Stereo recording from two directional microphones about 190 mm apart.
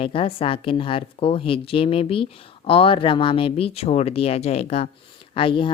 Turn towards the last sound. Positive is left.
turn(degrees=25)  # may be behind; listen again after turning